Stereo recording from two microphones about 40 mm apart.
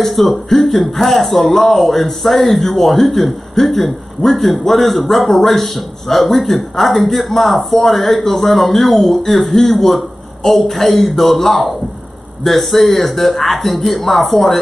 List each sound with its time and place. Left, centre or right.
0.0 s a man's voice: centre